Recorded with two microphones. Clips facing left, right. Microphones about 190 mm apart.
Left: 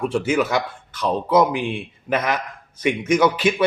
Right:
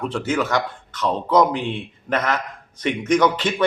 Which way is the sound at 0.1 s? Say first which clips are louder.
Left 2 dB; 10° left (ahead or behind).